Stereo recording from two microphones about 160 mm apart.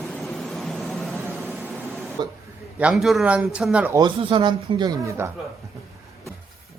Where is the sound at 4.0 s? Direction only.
30° right (ahead or behind).